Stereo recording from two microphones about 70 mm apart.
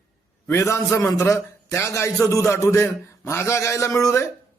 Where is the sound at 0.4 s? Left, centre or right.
Left.